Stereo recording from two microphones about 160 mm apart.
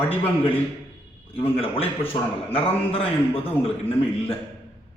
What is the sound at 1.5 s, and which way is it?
A man's voice, 35° left (ahead or behind).